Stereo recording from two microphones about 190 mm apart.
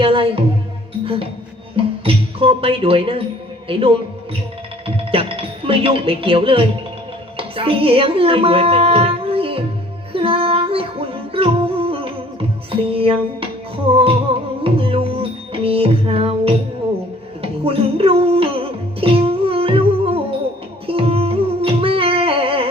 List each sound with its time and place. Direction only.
0.0 s music: 30° right (ahead or behind)
1.7 s speech: 30° right (ahead or behind)
3.7 s music: 30° right (ahead or behind)
4.9 s speech: 30° right (ahead or behind)
10.1 s music: 30° right (ahead or behind)